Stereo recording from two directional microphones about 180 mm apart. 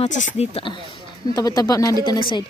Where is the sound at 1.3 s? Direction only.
20° left (ahead or behind).